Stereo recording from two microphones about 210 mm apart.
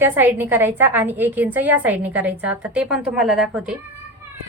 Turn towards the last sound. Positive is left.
turn(degrees=-5)  # may be behind; listen again after turning